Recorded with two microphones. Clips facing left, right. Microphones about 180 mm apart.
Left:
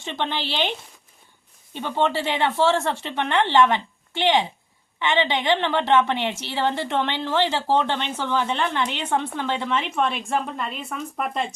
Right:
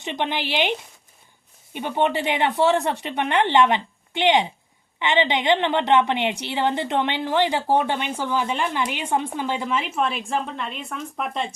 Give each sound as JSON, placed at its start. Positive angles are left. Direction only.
{"t": 0.0, "sound": "a woman's voice", "side_deg": -15}